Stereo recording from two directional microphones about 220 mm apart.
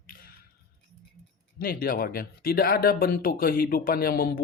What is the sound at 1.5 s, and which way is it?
Speech, 40° left (ahead or behind).